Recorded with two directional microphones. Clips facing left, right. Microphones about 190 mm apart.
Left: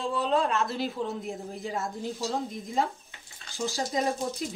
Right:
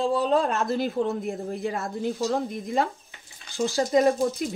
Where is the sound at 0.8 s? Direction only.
55° right (ahead or behind).